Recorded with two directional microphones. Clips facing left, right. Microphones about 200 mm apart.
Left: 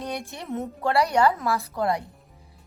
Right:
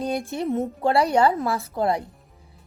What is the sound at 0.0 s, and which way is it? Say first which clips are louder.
A woman's voice: right 7 dB; 30° right (ahead or behind).